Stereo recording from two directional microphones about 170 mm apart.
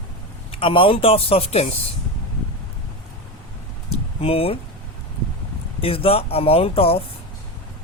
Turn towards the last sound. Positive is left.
turn(degrees=35)  # may be behind; listen again after turning